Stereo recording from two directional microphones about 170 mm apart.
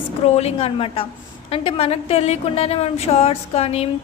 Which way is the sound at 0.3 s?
35° left (ahead or behind).